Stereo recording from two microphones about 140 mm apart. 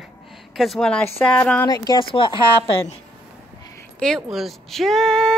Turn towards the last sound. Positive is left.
turn(degrees=5)  # may be behind; listen again after turning